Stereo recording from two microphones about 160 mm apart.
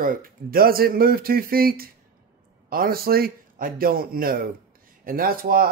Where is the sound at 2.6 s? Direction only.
65° right (ahead or behind).